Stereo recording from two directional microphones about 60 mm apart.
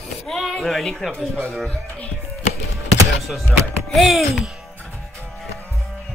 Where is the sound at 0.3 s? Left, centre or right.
Centre.